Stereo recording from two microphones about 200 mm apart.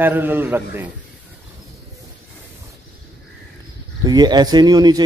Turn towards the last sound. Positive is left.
turn(degrees=-20)  # may be behind; listen again after turning